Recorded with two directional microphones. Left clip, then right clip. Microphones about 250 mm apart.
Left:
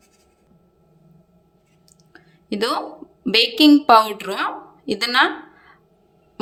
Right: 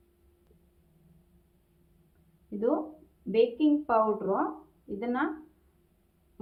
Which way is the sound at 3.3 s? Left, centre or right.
Left.